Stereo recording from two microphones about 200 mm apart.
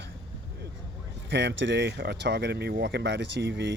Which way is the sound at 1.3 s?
60° right (ahead or behind).